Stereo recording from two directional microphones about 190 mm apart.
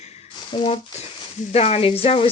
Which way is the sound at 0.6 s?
30° left (ahead or behind).